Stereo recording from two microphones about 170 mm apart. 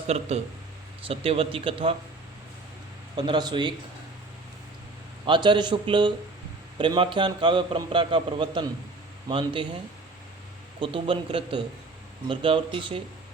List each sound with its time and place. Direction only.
0.3 s speech: 40° right (ahead or behind)
3.2 s a man's voice: 25° right (ahead or behind)
5.2 s a man's voice: 25° right (ahead or behind)
10.8 s speech: 30° right (ahead or behind)